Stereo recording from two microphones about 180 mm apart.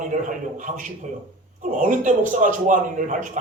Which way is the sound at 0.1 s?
45° right (ahead or behind).